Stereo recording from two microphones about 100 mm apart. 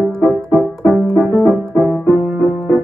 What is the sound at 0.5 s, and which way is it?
Music, 20° right (ahead or behind).